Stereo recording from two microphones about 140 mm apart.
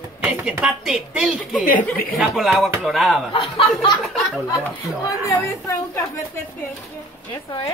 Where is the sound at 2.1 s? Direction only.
Centre (ahead or behind).